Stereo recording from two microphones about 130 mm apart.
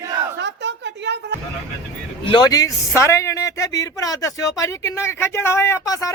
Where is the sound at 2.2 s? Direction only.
30° left (ahead or behind).